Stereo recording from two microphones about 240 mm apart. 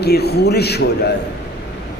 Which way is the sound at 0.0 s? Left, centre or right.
Left.